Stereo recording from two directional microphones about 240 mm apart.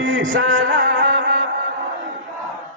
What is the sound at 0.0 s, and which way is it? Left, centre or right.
Music, right.